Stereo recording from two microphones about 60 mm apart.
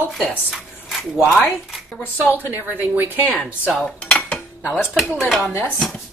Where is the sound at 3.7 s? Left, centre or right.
Centre.